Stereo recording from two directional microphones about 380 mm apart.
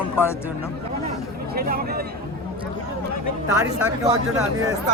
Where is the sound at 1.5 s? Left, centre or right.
Right.